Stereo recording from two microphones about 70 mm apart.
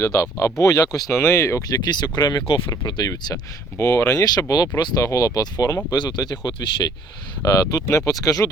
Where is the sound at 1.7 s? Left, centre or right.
Left.